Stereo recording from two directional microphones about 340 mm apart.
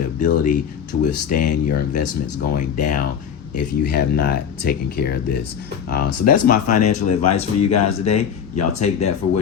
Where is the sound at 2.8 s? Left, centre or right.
Left.